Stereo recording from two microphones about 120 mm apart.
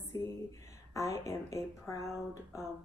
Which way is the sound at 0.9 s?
25° left (ahead or behind).